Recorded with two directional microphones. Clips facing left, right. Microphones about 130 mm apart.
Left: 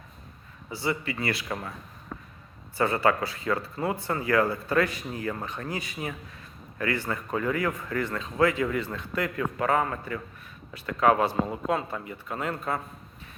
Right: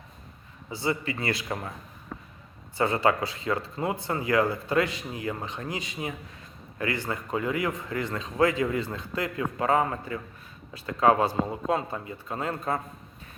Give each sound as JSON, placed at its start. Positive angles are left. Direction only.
{"t": 0.9, "sound": "a man's voice", "side_deg": -25}
{"t": 2.7, "sound": "a man's voice", "side_deg": -20}
{"t": 8.2, "sound": "a man's voice", "side_deg": -30}